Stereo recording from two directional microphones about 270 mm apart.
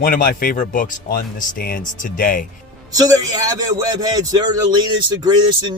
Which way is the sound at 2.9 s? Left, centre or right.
Centre.